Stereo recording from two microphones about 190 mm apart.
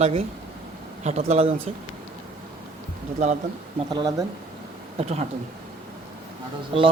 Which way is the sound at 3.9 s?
20° right (ahead or behind).